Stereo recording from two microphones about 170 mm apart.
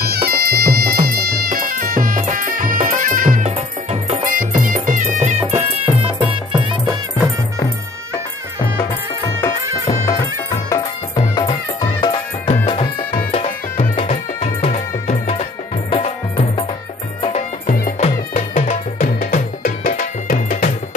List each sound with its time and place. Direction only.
0.0 s music: 65° right (ahead or behind); by 4.2 s 40° right (ahead or behind)
4.3 s music: 55° right (ahead or behind); by 7.0 s 25° right (ahead or behind)
9.4 s music: 15° left (ahead or behind)
11.3 s music: 30° left (ahead or behind); by 20.7 s 50° left (ahead or behind)